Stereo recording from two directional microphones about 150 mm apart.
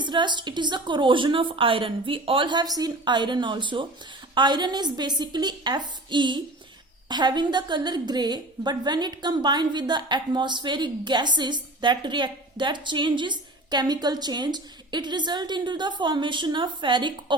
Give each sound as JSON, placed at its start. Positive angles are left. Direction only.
{"t": 0.0, "sound": "a woman's voice", "side_deg": -30}